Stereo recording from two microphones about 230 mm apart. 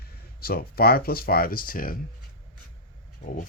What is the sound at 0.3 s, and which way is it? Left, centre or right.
Speech, left.